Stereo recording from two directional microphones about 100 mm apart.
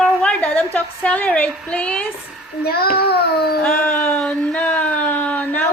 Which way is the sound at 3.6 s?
15° left (ahead or behind).